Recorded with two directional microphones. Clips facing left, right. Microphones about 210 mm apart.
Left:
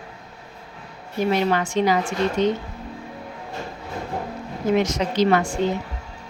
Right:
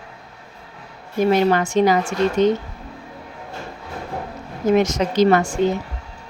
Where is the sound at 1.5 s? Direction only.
45° right (ahead or behind).